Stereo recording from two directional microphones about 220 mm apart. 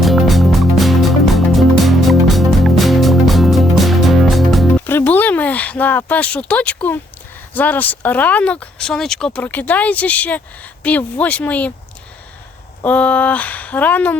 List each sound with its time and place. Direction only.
0.0 s music: centre (ahead or behind)
4.9 s speech: 10° left (ahead or behind)
12.8 s speech: 5° left (ahead or behind)